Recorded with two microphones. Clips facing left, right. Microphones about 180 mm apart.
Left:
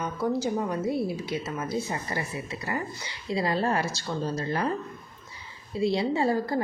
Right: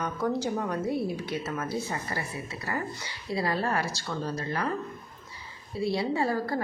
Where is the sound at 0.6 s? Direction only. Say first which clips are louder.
Left 1 dB; 10° left (ahead or behind).